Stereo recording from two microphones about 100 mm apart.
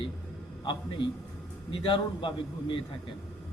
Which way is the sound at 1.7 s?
60° left (ahead or behind).